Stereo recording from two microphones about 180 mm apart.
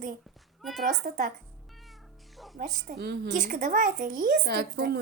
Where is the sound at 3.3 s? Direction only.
50° right (ahead or behind); by 5.0 s 65° right (ahead or behind).